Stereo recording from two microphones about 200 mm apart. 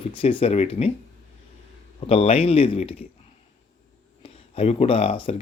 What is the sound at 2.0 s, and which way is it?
Speech, 30° left (ahead or behind).